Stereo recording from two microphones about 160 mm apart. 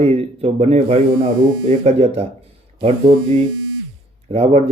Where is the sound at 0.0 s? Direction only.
40° right (ahead or behind).